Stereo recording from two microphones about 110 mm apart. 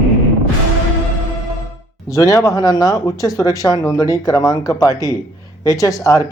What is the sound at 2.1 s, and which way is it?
Speech, 30° left (ahead or behind).